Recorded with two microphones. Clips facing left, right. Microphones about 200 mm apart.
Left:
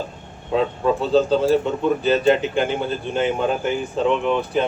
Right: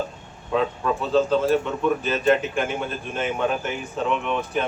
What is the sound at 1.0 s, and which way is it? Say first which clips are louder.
Speech: left 2 dB; 35° left (ahead or behind).